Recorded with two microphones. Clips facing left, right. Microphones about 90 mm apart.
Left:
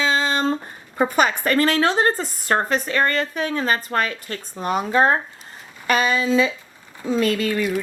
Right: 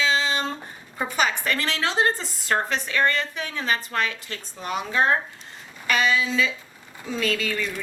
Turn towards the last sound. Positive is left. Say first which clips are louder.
# left 6 dB
turn(degrees=40)  # may be behind; listen again after turning